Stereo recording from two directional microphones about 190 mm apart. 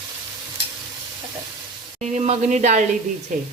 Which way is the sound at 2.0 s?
35° right (ahead or behind).